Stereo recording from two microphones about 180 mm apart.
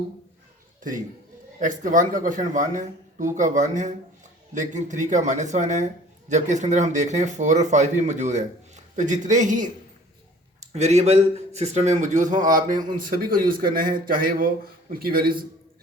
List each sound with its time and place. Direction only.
1.5 s speech: 45° right (ahead or behind)
10.7 s speech: 40° right (ahead or behind); by 15.4 s 55° right (ahead or behind)